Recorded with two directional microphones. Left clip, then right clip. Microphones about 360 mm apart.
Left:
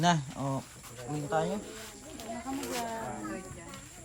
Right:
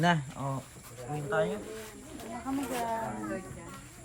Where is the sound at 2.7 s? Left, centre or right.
Centre.